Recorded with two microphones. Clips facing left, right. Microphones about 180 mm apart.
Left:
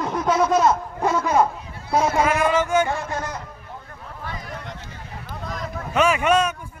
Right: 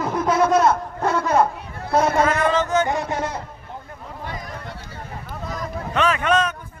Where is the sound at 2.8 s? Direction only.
20° right (ahead or behind).